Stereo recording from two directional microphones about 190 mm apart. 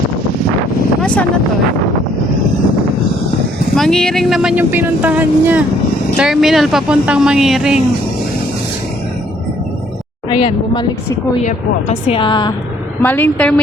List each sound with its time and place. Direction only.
1.0 s vehicle: 5° left (ahead or behind)
3.8 s speech: 5° left (ahead or behind)
10.2 s a woman's voice: 25° left (ahead or behind)
11.4 s a woman's voice: 35° left (ahead or behind)
13.0 s a woman's voice: 10° left (ahead or behind)